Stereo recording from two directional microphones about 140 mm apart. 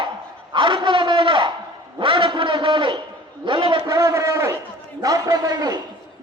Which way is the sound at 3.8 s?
20° right (ahead or behind).